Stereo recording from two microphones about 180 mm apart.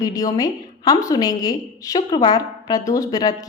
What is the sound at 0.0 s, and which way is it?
A woman's voice, 20° left (ahead or behind).